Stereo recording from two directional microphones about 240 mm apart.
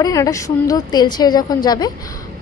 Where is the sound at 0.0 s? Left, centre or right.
Centre.